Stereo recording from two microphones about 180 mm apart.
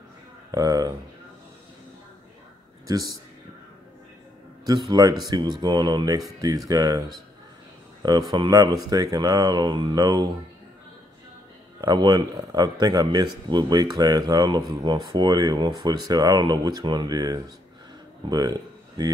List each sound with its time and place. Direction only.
0.5 s speech: 20° right (ahead or behind)
2.9 s speech: 20° right (ahead or behind)
4.6 s speech: 20° right (ahead or behind)
8.0 s speech: 20° right (ahead or behind)
11.8 s speech: 20° right (ahead or behind)